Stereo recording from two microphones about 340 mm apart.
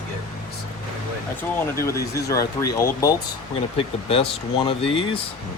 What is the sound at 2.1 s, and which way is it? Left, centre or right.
Speech, centre.